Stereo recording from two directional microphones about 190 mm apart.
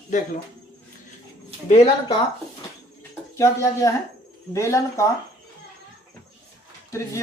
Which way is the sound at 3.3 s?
15° left (ahead or behind).